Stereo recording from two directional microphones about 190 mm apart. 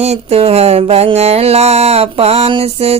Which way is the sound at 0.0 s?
35° right (ahead or behind).